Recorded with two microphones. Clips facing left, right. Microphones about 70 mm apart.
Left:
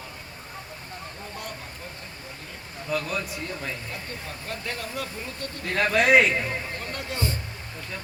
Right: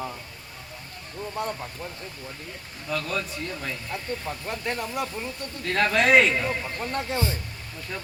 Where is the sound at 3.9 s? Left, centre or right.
Right.